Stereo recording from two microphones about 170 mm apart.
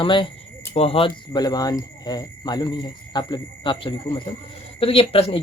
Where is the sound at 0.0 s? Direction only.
30° left (ahead or behind).